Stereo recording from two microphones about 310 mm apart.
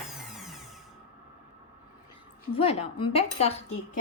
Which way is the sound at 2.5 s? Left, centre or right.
Centre.